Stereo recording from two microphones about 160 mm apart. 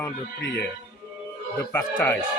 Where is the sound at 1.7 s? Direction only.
10° left (ahead or behind).